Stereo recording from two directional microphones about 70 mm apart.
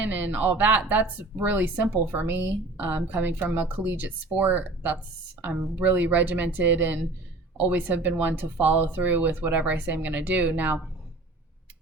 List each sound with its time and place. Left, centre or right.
0.0 s speech: right